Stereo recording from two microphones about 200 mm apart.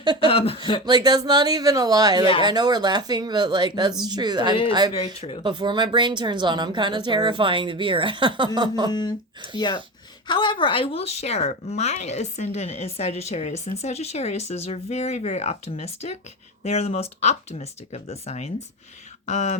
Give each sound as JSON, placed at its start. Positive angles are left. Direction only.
{"t": 0.2, "sound": "speech", "side_deg": 30}
{"t": 0.9, "sound": "speech", "side_deg": -20}
{"t": 5.1, "sound": "speech", "side_deg": 30}
{"t": 5.4, "sound": "speech", "side_deg": -25}
{"t": 8.9, "sound": "speech", "side_deg": 20}